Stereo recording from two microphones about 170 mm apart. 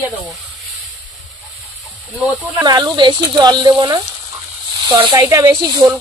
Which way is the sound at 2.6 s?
25° right (ahead or behind).